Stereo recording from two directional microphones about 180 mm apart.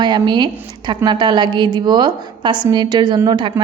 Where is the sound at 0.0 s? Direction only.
25° right (ahead or behind).